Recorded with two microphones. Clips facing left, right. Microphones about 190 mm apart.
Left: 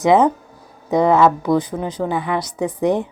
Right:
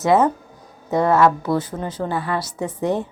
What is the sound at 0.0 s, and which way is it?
A woman's voice, 15° left (ahead or behind).